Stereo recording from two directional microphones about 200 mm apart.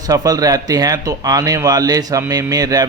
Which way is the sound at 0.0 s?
20° right (ahead or behind).